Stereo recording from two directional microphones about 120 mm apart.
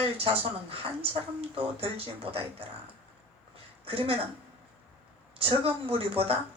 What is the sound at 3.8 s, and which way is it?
Speech, 50° right (ahead or behind).